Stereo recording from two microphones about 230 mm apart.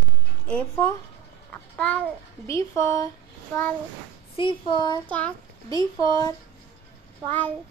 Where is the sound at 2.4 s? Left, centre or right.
Centre.